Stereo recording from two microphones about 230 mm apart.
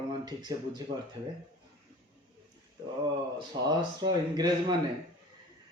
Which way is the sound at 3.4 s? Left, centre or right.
Centre.